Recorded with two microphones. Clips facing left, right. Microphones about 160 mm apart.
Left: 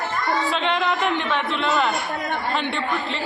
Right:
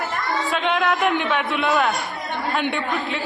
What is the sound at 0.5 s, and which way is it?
A man's voice, 5° right (ahead or behind).